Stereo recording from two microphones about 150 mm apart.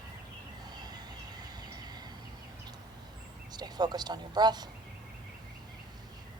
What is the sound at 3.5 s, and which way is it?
Speech, 25° right (ahead or behind).